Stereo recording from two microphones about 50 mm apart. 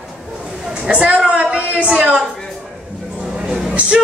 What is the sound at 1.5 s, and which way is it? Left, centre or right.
Speech, right.